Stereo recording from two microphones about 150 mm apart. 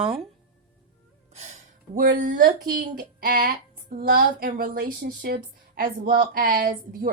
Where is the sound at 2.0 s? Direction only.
65° right (ahead or behind).